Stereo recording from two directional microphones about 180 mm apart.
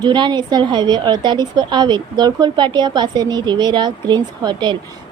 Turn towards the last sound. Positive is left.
turn(degrees=-25)  # may be behind; listen again after turning